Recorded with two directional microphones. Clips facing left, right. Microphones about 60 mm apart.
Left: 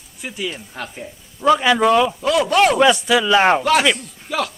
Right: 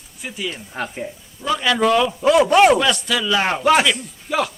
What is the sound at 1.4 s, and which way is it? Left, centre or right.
Speech, left.